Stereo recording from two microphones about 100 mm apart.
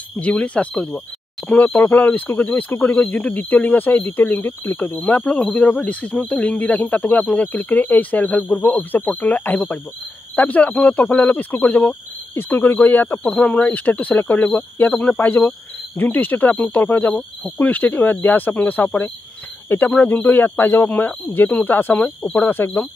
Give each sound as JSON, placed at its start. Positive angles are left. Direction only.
{"t": 0.2, "sound": "speech", "side_deg": 15}
{"t": 21.9, "sound": "speech", "side_deg": 5}
{"t": 22.3, "sound": "speech", "side_deg": 20}